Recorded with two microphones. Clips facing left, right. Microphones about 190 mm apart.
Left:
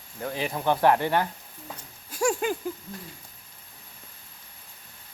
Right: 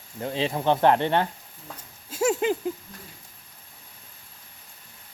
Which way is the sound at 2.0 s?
25° right (ahead or behind).